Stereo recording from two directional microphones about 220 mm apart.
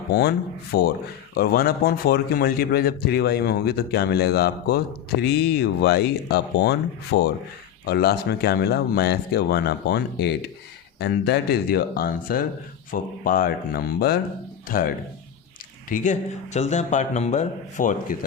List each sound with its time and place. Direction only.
0.1 s a man's voice: 45° left (ahead or behind)